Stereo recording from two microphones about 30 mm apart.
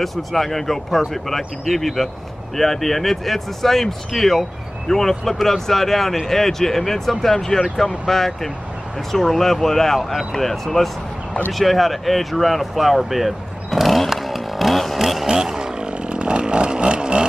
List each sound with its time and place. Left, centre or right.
0.0 s speech: centre
15.2 s chainsaw: right
15.6 s a sound: right